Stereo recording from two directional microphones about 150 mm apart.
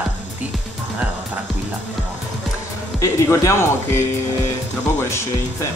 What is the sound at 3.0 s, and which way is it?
Speech, 20° left (ahead or behind).